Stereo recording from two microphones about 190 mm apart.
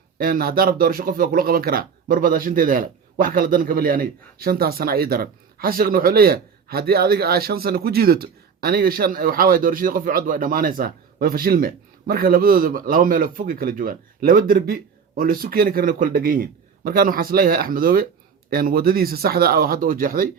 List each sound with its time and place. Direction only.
0.2 s speech: 50° right (ahead or behind)